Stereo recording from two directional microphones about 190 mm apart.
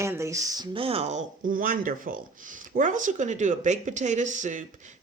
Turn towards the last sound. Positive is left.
turn(degrees=-40)  # may be behind; listen again after turning